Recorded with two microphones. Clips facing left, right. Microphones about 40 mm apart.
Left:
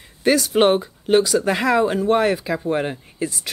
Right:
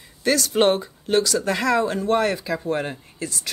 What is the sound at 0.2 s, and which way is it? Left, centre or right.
Speech, centre.